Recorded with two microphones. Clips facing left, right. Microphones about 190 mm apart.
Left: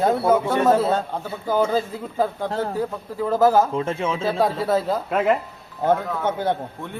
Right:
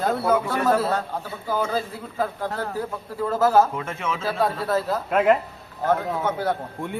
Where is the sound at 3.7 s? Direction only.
30° left (ahead or behind).